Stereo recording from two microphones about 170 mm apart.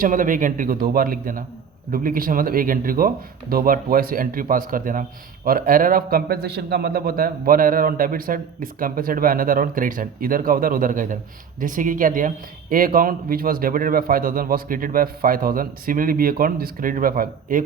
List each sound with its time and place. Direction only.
0.0 s a man's voice: 55° right (ahead or behind)